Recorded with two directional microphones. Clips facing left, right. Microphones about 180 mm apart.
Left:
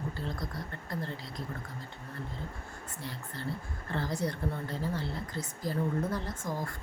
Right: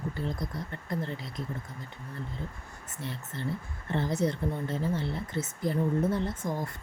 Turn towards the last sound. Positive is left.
turn(degrees=-20)  # may be behind; listen again after turning